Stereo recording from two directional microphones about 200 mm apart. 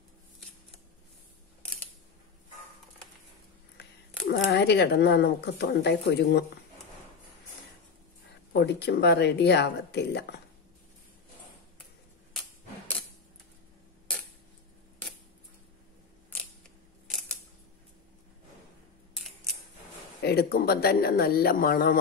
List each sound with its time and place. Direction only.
4.4 s speech: 55° left (ahead or behind)
8.5 s speech: 55° left (ahead or behind)
19.1 s scissors: centre (ahead or behind)
20.2 s speech: 50° left (ahead or behind)